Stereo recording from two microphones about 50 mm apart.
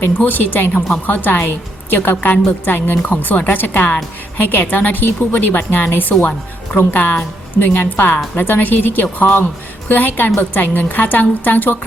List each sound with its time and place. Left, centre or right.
0.3 s a woman's voice: left